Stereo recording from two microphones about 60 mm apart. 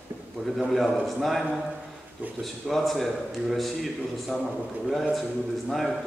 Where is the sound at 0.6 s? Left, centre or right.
Centre.